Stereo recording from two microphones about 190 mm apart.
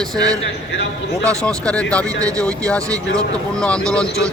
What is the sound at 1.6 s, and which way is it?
A man's voice, 5° left (ahead or behind).